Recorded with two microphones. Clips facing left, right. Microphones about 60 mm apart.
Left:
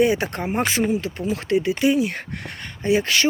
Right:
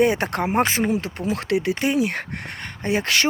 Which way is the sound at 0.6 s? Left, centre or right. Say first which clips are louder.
Left 1 dB; right.